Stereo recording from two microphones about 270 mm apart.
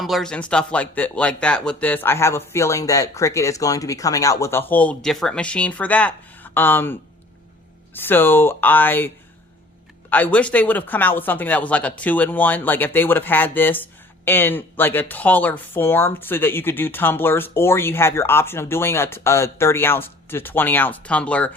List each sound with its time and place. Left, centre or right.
0.0 s speech: centre
7.9 s speech: centre